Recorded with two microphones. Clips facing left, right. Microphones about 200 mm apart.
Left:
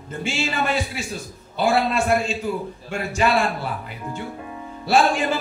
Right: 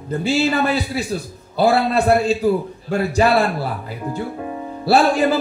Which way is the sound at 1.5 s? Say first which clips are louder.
Right 4 dB; 35° right (ahead or behind).